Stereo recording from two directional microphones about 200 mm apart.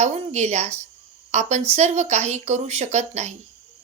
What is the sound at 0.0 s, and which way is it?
A woman's voice, 35° right (ahead or behind).